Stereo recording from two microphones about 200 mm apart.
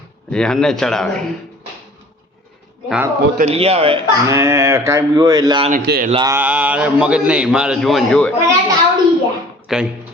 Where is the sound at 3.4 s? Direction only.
30° right (ahead or behind).